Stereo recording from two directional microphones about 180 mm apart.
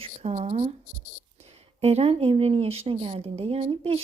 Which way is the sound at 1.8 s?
35° right (ahead or behind).